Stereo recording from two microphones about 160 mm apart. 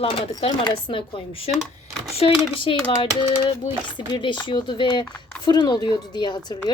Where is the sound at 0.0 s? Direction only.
35° left (ahead or behind).